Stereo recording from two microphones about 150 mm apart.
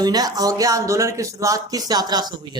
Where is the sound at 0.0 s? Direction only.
25° right (ahead or behind).